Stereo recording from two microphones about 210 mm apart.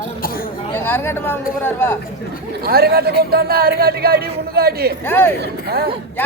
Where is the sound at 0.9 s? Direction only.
10° left (ahead or behind).